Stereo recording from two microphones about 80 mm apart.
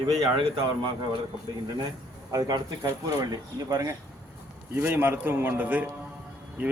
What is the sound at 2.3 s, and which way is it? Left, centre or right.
Speech, right.